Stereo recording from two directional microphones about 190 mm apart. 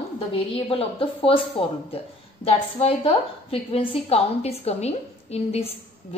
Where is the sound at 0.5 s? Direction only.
30° left (ahead or behind).